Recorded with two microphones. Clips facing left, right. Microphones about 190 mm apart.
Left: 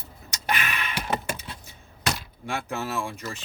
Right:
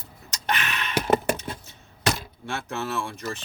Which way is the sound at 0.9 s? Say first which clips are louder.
Right 9 dB; 45° right (ahead or behind).